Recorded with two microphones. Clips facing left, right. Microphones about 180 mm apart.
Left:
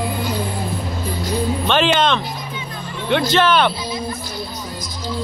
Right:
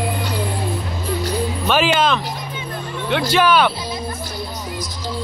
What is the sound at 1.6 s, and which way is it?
Music, 5° right (ahead or behind).